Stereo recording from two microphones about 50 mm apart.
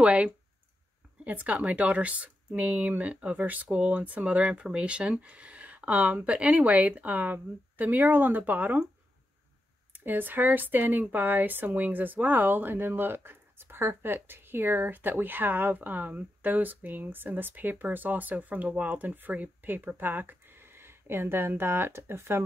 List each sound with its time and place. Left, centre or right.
0.0 s speech: right
9.9 s speech: right